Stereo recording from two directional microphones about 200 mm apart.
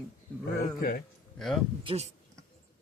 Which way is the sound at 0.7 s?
50° left (ahead or behind).